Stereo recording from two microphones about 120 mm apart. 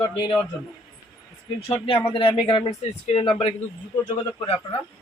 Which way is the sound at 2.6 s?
55° left (ahead or behind).